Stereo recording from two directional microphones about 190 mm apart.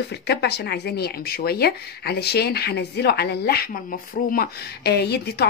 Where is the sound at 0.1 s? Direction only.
60° left (ahead or behind).